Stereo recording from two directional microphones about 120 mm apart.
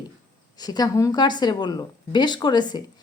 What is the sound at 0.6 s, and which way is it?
Speech, 35° left (ahead or behind).